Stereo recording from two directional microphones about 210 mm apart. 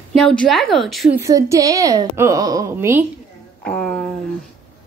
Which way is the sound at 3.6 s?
5° left (ahead or behind).